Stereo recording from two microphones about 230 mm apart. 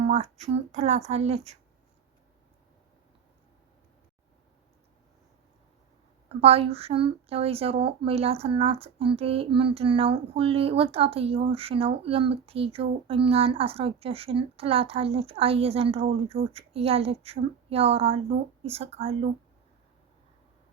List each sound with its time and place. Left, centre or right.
0.0 s speech: right
6.2 s speech: right